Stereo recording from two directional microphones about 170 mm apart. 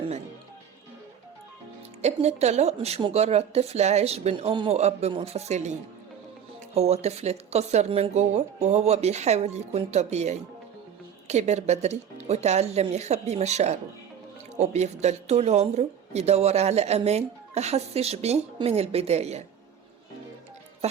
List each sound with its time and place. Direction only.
2.0 s speech: 40° right (ahead or behind)
6.7 s speech: 40° right (ahead or behind)